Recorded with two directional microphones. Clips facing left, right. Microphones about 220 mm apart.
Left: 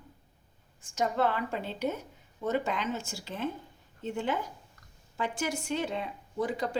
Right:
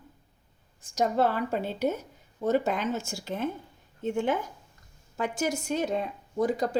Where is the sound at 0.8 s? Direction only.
40° right (ahead or behind).